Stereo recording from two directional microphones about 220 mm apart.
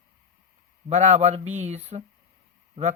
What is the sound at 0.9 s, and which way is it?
Speech, 30° right (ahead or behind).